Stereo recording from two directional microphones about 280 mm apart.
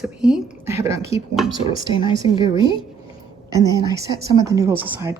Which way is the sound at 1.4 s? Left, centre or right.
Centre.